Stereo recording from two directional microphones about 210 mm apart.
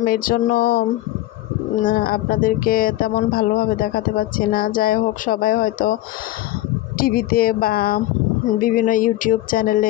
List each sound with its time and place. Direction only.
0.0 s speech: 45° left (ahead or behind)
7.0 s speech: 45° left (ahead or behind)
8.5 s music: 40° left (ahead or behind)